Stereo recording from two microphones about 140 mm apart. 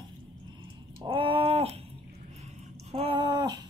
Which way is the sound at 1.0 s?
40° right (ahead or behind).